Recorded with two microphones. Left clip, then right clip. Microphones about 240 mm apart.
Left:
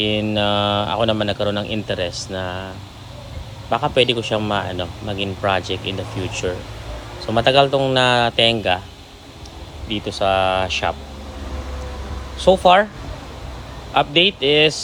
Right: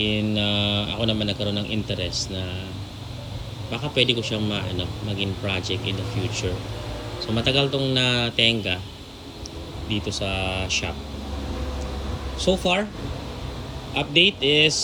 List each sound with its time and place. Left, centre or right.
0.0 s a man's voice: left
3.7 s a man's voice: left
9.9 s a man's voice: left
12.5 s a man's voice: left
14.4 s a man's voice: left